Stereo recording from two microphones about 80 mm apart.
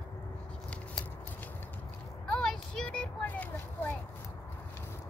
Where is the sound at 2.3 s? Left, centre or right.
Centre.